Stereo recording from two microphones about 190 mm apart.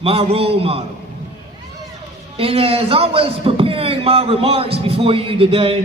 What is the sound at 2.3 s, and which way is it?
A man's voice, 30° right (ahead or behind).